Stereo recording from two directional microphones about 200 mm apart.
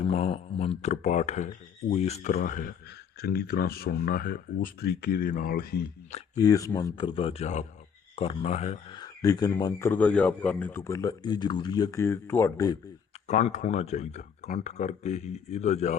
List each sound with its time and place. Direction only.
0.1 s speech: 30° left (ahead or behind); by 5.9 s 50° left (ahead or behind)
6.4 s speech: 15° left (ahead or behind)
13.2 s speech: 35° left (ahead or behind)